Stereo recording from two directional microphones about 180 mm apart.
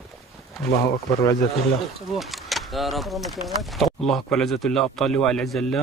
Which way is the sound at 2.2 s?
Centre (ahead or behind).